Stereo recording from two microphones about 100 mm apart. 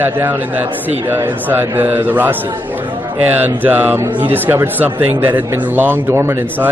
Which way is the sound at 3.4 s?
20° right (ahead or behind).